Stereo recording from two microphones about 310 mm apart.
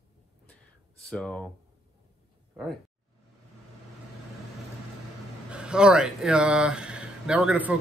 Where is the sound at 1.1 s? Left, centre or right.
Centre.